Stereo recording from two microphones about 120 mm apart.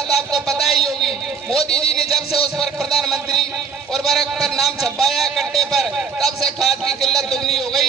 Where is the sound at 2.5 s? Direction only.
Centre (ahead or behind).